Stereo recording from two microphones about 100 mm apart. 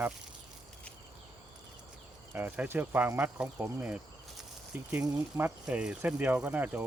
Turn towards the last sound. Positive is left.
turn(degrees=-15)  # may be behind; listen again after turning